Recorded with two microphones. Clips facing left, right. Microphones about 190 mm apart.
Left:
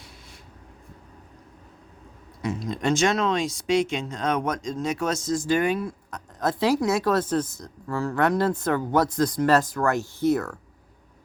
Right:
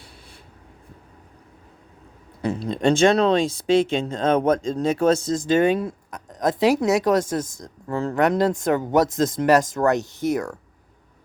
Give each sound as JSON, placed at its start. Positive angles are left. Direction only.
{"t": 2.4, "sound": "speech", "side_deg": -30}